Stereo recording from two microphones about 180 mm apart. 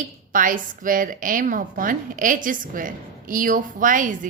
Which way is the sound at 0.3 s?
50° right (ahead or behind).